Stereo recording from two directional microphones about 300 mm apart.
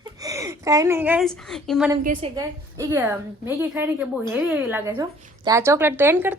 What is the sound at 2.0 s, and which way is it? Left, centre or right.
A woman's voice, centre.